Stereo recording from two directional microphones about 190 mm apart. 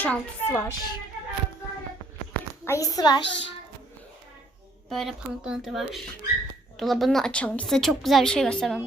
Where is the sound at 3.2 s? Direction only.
70° left (ahead or behind).